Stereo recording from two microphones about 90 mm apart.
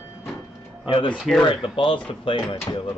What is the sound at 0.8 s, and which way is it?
Speech, 65° left (ahead or behind).